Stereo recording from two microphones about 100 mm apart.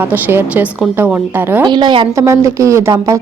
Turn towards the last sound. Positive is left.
turn(degrees=-30)  # may be behind; listen again after turning